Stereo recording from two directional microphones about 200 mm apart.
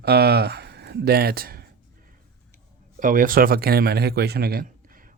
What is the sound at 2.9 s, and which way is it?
Speech, 40° right (ahead or behind).